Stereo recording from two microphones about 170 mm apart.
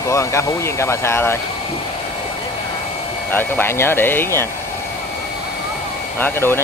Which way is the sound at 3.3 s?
10° left (ahead or behind).